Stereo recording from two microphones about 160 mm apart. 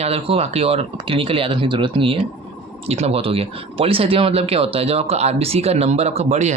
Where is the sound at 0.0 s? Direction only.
40° right (ahead or behind).